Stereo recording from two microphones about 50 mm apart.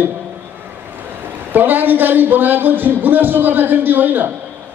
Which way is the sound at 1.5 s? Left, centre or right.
Right.